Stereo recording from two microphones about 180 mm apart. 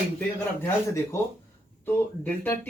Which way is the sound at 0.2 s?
15° left (ahead or behind).